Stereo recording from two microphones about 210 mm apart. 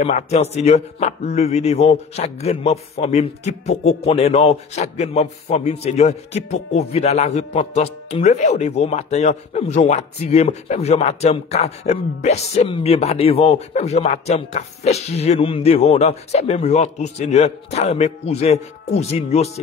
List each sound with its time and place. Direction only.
0.0 s speech: 30° left (ahead or behind)